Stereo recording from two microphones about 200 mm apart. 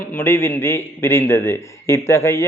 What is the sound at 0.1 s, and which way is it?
A man's voice, 10° left (ahead or behind).